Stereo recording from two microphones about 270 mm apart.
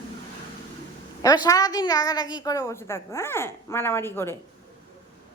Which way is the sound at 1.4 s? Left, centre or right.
Centre.